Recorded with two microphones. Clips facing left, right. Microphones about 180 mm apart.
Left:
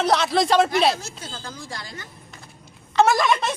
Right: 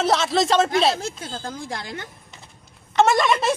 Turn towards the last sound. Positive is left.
turn(degrees=0)  # may be behind; listen again after turning